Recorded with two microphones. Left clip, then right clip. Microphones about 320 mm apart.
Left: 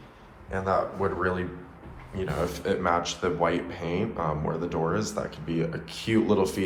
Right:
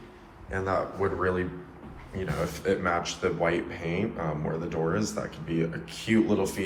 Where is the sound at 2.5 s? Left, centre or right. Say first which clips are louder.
Left 1 dB; centre.